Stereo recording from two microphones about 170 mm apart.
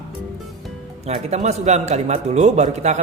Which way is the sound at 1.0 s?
40° right (ahead or behind).